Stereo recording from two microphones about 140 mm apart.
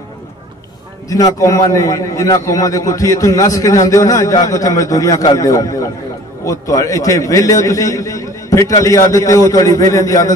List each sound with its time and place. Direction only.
1.0 s a man's voice: 25° left (ahead or behind)